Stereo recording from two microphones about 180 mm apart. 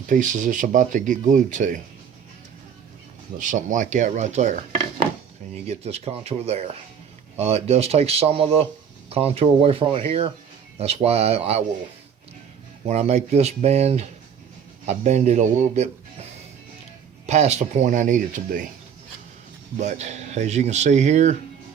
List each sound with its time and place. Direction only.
0.1 s speech: 45° right (ahead or behind)
3.3 s speech: 45° right (ahead or behind)
5.6 s speech: 35° right (ahead or behind)
12.9 s speech: 40° right (ahead or behind)
17.2 s speech: 40° right (ahead or behind)
19.8 s speech: 40° right (ahead or behind)